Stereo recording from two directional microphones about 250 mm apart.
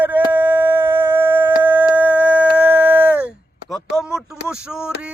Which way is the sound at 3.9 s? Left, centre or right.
Centre.